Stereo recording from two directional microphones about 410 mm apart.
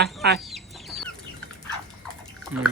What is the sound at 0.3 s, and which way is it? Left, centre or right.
Chicken, centre.